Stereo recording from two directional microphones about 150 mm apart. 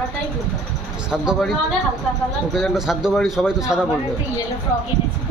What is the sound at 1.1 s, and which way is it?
A man's voice, centre (ahead or behind).